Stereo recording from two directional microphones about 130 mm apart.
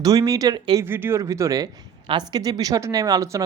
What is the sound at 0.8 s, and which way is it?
Speech, 15° right (ahead or behind).